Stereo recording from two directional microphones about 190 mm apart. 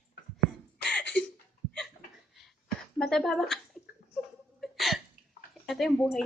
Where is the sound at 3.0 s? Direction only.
5° left (ahead or behind).